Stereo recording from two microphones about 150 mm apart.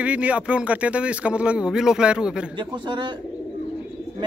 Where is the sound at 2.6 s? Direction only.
30° right (ahead or behind).